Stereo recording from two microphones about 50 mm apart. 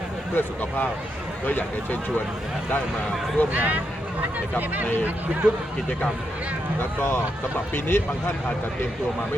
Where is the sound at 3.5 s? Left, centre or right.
Right.